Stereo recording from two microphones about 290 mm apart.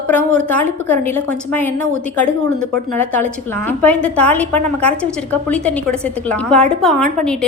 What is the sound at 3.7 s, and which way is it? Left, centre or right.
A woman's voice, centre.